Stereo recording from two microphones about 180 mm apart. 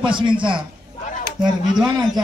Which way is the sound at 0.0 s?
25° right (ahead or behind).